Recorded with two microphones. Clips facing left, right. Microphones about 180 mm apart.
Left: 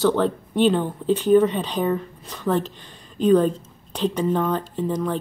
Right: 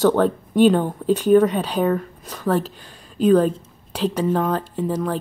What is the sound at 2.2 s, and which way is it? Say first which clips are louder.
Speech: right 1 dB; 35° right (ahead or behind).